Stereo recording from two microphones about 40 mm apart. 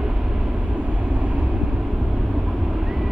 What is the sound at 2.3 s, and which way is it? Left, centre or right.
Vehicle, centre.